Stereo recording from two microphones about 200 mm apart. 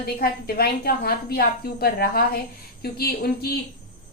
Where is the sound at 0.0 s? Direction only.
50° left (ahead or behind).